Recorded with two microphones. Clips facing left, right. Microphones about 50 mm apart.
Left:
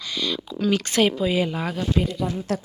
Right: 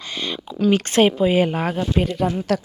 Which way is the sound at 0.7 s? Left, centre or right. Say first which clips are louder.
Right 4 dB; right.